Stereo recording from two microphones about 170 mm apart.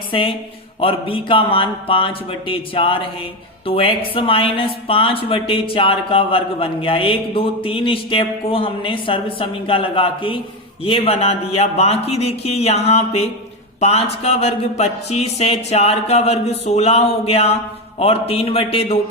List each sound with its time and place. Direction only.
0.1 s speech: 30° left (ahead or behind)